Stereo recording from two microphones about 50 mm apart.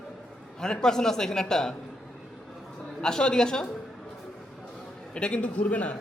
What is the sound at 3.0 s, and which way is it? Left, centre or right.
Speech, centre.